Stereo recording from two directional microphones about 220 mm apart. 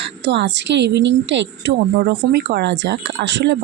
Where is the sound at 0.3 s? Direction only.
50° right (ahead or behind).